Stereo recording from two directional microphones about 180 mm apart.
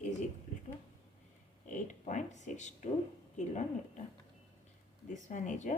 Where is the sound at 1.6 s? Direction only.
45° left (ahead or behind).